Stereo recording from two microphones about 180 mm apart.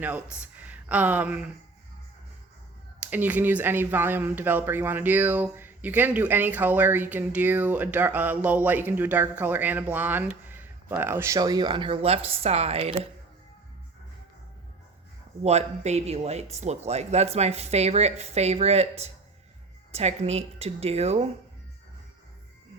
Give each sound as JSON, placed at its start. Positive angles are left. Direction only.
{"t": 0.6, "sound": "a sound", "side_deg": -10}
{"t": 3.0, "sound": "speech", "side_deg": -10}
{"t": 15.4, "sound": "speech", "side_deg": -35}